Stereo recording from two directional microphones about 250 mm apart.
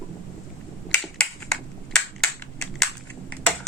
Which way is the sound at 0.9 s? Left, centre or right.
Centre.